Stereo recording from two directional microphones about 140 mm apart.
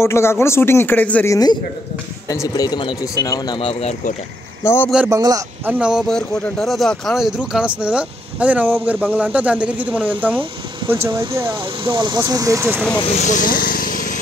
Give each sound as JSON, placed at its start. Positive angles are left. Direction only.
{"t": 0.0, "sound": "speech", "side_deg": 20}
{"t": 1.3, "sound": "speech", "side_deg": 30}
{"t": 4.6, "sound": "speech", "side_deg": 15}
{"t": 5.1, "sound": "speech", "side_deg": -25}
{"t": 5.7, "sound": "a man's voice", "side_deg": -5}
{"t": 11.8, "sound": "speech", "side_deg": -35}
{"t": 13.2, "sound": "speech", "side_deg": 70}